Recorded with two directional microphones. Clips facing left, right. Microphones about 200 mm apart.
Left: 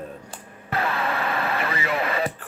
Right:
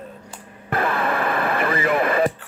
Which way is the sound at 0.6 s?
55° right (ahead or behind).